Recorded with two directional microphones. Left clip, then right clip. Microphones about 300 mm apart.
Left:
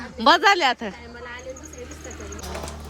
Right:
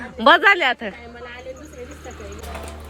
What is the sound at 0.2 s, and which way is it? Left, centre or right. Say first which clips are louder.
Speech: right 3 dB; centre.